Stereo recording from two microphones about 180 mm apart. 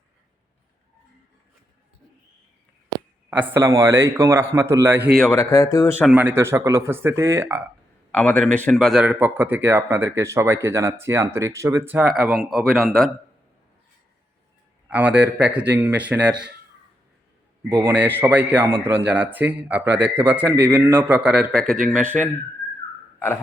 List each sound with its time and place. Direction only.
3.2 s speech: 10° right (ahead or behind)
5.1 s a man's voice: 5° left (ahead or behind)
5.4 s speech: 15° left (ahead or behind)
6.1 s speech: 10° right (ahead or behind)
8.1 s a man's voice: 5° left (ahead or behind)
14.8 s a man's voice: 10° right (ahead or behind)
17.7 s a man's voice: 10° right (ahead or behind)